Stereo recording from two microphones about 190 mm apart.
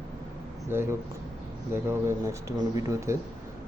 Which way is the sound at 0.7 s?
10° right (ahead or behind).